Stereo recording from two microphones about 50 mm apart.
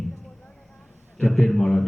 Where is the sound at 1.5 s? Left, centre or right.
Centre.